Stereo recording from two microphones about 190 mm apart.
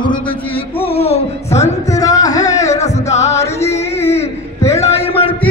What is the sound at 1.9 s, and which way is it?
Music, 20° left (ahead or behind).